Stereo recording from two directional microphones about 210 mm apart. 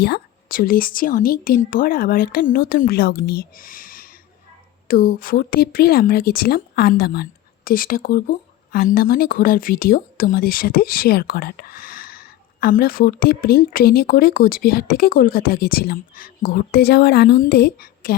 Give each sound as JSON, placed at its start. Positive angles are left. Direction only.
{"t": 0.0, "sound": "speech", "side_deg": 45}